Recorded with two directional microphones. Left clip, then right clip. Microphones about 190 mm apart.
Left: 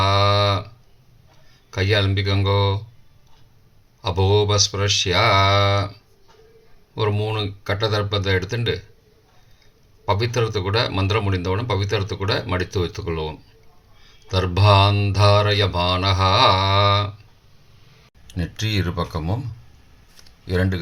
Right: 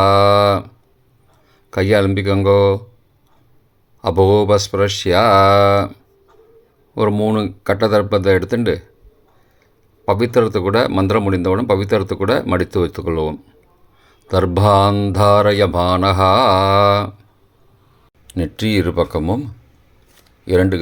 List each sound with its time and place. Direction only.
0.0 s a sound: 50° right (ahead or behind)
1.7 s speech: 50° right (ahead or behind)
4.0 s speech: 50° right (ahead or behind)
7.0 s speech: 50° right (ahead or behind)
10.1 s speech: 50° right (ahead or behind)
18.3 s speech: 45° right (ahead or behind)
20.5 s speech: 50° right (ahead or behind)